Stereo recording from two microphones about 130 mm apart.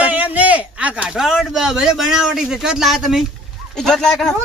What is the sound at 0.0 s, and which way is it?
A man's voice, 10° right (ahead or behind).